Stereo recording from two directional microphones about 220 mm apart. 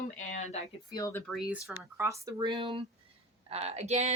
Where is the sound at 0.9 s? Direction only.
10° left (ahead or behind).